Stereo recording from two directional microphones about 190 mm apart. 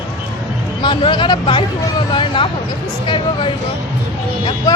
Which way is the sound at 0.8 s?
25° left (ahead or behind).